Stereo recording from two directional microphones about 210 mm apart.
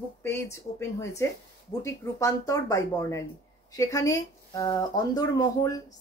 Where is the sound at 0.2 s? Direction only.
10° left (ahead or behind).